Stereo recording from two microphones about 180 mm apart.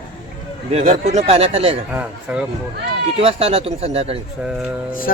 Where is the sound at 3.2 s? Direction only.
30° right (ahead or behind).